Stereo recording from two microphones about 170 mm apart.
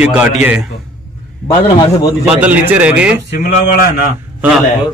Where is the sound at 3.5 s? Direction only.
60° left (ahead or behind).